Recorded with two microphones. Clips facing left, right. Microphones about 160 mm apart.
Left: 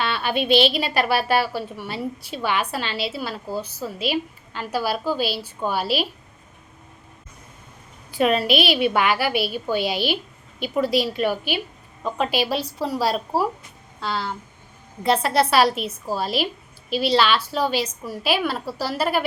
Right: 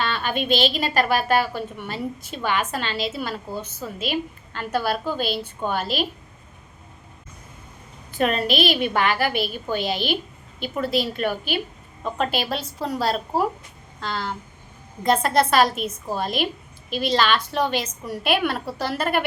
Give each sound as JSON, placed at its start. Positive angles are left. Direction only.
{"t": 0.0, "sound": "a sound", "side_deg": 10}
{"t": 0.7, "sound": "a woman's voice", "side_deg": 10}
{"t": 3.9, "sound": "a woman's voice", "side_deg": -45}
{"t": 4.5, "sound": "a woman's voice", "side_deg": 5}
{"t": 8.1, "sound": "a woman's voice", "side_deg": 10}